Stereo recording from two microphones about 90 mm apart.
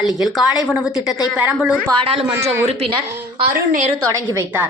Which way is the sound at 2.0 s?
90° right.